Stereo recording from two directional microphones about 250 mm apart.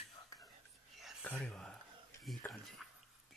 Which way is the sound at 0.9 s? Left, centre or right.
Centre.